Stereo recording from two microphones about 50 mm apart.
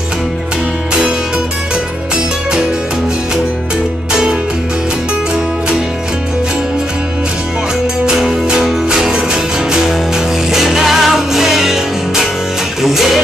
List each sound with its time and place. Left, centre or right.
4.1 s music: centre
8.0 s music: centre